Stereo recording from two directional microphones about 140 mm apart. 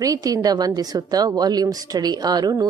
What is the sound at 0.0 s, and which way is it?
A woman's voice, 25° right (ahead or behind).